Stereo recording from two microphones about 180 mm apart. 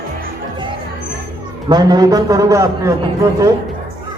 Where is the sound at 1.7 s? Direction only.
20° right (ahead or behind).